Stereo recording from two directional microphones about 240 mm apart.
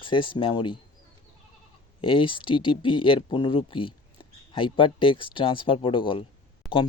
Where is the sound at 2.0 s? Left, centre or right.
Left.